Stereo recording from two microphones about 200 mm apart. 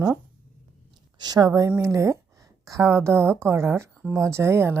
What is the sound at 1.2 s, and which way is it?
A woman's voice, 20° right (ahead or behind).